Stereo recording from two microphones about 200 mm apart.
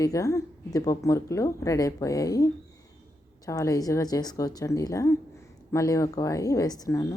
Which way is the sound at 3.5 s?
15° left (ahead or behind).